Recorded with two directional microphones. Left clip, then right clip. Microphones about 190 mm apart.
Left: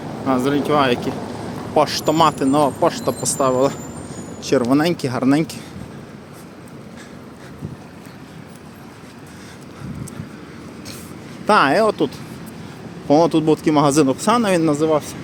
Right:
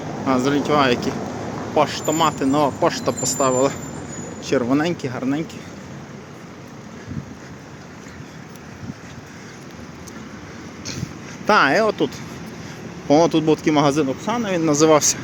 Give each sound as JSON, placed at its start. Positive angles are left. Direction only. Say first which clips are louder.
{"t": 0.3, "sound": "speech", "louder": "left 1 dB", "side_deg": 5}
{"t": 1.7, "sound": "speech", "louder": "left 3 dB", "side_deg": 30}
{"t": 2.4, "sound": "speech", "louder": "left 2 dB", "side_deg": 15}
{"t": 11.4, "sound": "speech", "louder": "left 1 dB", "side_deg": 10}
{"t": 14.1, "sound": "speech", "louder": "left 6 dB", "side_deg": 45}
{"t": 14.7, "sound": "speech", "louder": "right 3 dB", "side_deg": -5}